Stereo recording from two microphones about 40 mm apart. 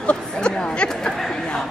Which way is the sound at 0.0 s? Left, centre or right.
Left.